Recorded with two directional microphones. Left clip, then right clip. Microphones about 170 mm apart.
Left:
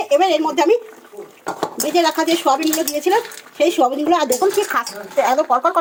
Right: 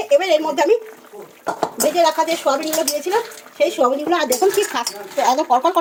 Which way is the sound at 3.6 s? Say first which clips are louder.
Left 1 dB; 30° left (ahead or behind).